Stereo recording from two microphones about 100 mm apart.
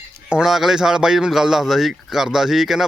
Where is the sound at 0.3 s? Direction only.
5° right (ahead or behind).